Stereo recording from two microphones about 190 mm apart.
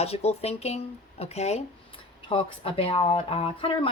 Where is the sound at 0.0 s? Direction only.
30° left (ahead or behind).